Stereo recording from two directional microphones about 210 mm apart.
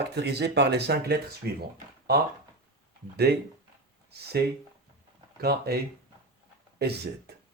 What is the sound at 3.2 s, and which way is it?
Speech, 50° right (ahead or behind).